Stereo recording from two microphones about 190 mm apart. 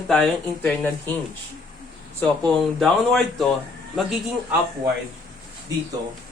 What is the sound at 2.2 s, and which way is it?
A woman's voice, 5° left (ahead or behind).